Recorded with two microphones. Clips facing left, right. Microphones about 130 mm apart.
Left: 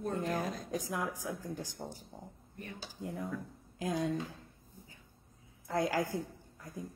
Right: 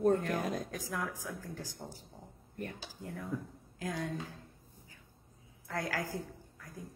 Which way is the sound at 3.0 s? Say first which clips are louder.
Left 1 dB; 20° left (ahead or behind).